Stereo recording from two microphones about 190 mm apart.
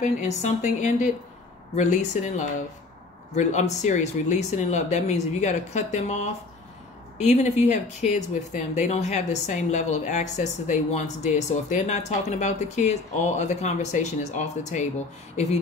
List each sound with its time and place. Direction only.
0.0 s speech: 40° left (ahead or behind)